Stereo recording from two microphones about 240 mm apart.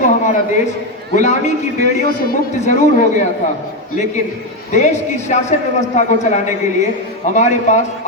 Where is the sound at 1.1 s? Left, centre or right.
Left.